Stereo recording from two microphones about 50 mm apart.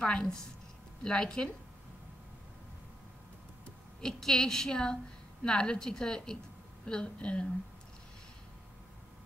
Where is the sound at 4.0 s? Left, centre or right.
Centre.